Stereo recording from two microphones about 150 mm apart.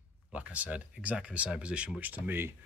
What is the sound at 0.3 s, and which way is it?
Speech, 10° right (ahead or behind).